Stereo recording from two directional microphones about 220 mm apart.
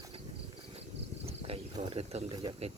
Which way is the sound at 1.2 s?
30° right (ahead or behind).